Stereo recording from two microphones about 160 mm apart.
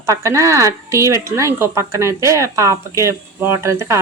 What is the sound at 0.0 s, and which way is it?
A woman's voice, 20° right (ahead or behind).